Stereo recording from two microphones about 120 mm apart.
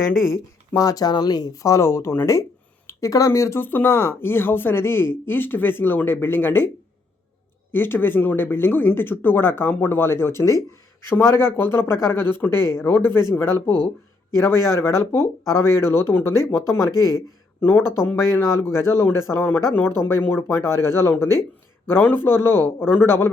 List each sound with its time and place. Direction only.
0.3 s speech: 25° left (ahead or behind)
7.7 s speech: 20° left (ahead or behind)